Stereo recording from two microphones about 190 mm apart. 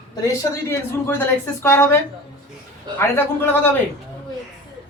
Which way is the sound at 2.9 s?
10° left (ahead or behind).